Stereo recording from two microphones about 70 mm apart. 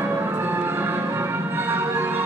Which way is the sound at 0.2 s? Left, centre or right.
Right.